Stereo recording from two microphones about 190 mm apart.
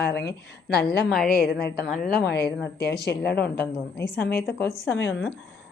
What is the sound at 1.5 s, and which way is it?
Speech, 60° left (ahead or behind).